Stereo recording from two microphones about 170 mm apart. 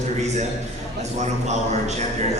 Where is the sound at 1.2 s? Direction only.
40° right (ahead or behind).